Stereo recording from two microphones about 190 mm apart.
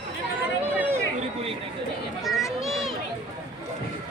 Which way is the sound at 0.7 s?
10° right (ahead or behind).